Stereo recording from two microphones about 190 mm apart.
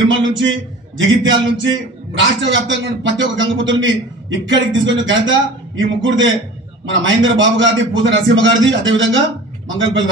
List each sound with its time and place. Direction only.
0.1 s a man's voice: 80° right